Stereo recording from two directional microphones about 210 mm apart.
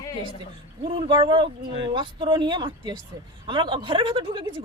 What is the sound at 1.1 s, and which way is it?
A woman's voice, 20° right (ahead or behind).